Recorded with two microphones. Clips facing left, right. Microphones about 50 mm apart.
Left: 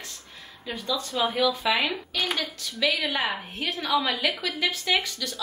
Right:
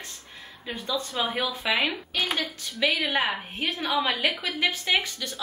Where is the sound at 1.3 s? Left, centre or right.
Right.